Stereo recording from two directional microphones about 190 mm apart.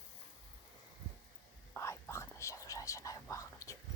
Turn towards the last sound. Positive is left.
turn(degrees=15)  # may be behind; listen again after turning